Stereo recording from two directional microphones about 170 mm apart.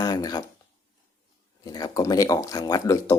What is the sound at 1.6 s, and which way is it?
Speech, 20° left (ahead or behind).